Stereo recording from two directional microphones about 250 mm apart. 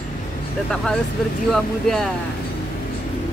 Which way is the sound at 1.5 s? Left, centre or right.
Centre.